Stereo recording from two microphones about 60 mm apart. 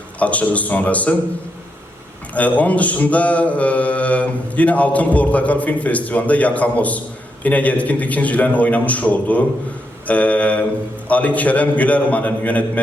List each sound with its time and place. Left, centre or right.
0.2 s mantra: left
2.3 s mantra: left